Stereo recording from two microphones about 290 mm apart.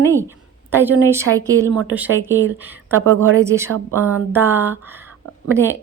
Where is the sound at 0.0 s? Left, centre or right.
Centre.